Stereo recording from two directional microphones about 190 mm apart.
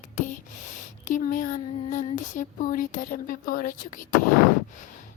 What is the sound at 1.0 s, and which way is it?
A woman's voice, 45° left (ahead or behind).